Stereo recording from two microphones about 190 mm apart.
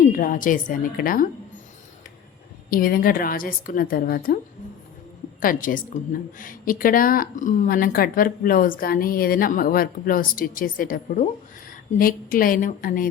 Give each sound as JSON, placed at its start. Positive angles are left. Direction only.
{"t": 0.1, "sound": "speech", "side_deg": 45}
{"t": 2.6, "sound": "speech", "side_deg": 50}
{"t": 5.4, "sound": "speech", "side_deg": 45}